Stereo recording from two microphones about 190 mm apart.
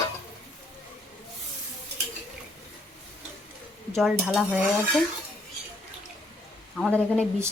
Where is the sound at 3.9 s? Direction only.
Centre (ahead or behind).